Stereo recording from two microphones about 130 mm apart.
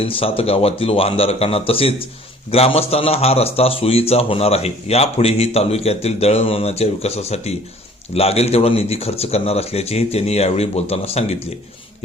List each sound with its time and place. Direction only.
0.0 s speech: 45° left (ahead or behind)